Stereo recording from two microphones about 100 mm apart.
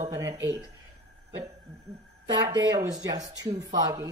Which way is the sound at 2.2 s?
45° right (ahead or behind).